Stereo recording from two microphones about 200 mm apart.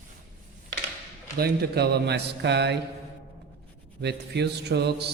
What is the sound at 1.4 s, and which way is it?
Speech, 50° right (ahead or behind).